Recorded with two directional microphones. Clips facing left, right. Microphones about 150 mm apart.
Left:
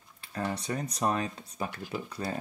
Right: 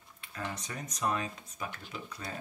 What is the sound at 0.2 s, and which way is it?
Speech, 35° left (ahead or behind).